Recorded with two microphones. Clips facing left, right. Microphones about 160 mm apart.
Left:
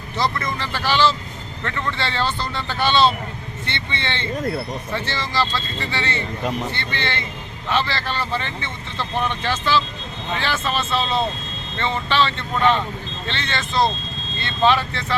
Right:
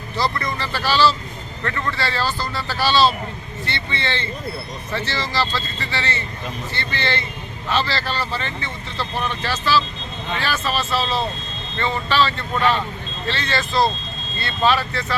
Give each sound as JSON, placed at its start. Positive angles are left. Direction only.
{"t": 0.9, "sound": "speech", "side_deg": 20}